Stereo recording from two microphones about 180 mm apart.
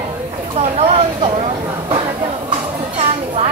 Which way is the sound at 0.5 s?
35° right (ahead or behind).